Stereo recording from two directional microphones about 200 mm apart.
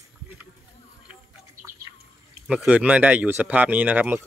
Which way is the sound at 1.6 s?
45° right (ahead or behind).